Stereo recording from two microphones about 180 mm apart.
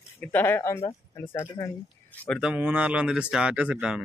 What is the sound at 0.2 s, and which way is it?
Speech, 10° left (ahead or behind).